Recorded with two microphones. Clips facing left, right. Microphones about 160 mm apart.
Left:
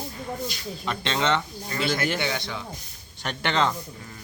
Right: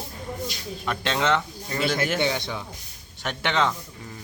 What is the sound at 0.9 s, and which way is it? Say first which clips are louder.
Speech: right 1 dB; 5° right (ahead or behind).